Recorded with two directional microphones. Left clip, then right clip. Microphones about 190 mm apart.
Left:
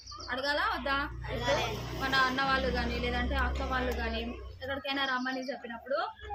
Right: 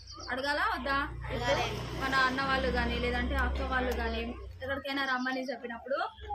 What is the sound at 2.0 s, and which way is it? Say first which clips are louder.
Speech: left 1 dB; 5° right (ahead or behind).